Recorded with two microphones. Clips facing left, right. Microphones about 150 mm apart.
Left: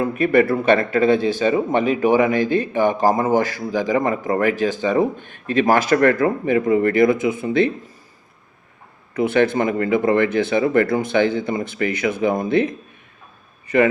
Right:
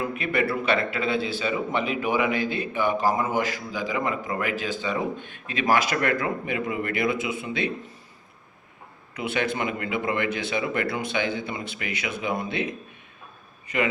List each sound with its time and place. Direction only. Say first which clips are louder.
0.0 s a man's voice: left 9 dB; 45° left (ahead or behind)
9.1 s a man's voice: left 10 dB; 50° left (ahead or behind)